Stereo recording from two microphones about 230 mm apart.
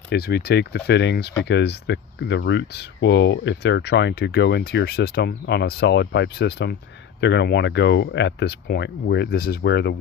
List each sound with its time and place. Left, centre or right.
0.1 s speech: left